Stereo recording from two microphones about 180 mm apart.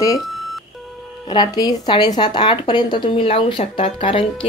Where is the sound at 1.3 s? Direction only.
25° left (ahead or behind).